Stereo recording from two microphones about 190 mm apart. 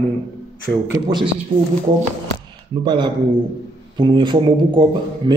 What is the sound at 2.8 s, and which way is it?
A man's voice, 25° right (ahead or behind).